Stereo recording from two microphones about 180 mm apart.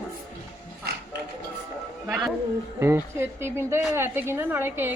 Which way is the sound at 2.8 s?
15° right (ahead or behind).